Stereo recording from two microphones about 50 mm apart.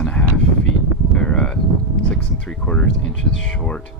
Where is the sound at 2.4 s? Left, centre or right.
Left.